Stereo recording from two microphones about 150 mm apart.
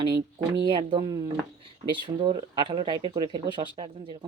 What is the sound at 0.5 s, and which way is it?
Speech, 35° right (ahead or behind).